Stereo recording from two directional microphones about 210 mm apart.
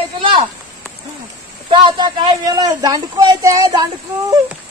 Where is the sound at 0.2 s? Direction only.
25° right (ahead or behind).